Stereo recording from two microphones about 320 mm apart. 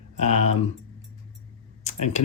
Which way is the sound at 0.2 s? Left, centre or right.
Left.